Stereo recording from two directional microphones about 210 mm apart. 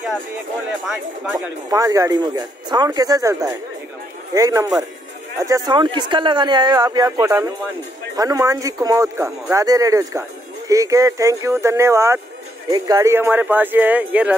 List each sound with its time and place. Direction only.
1.3 s speech: 15° right (ahead or behind)